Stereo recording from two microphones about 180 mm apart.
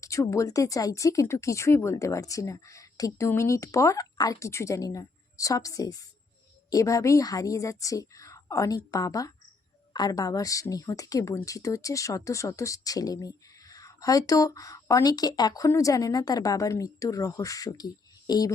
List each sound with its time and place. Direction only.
0.0 s a woman's voice: 15° left (ahead or behind)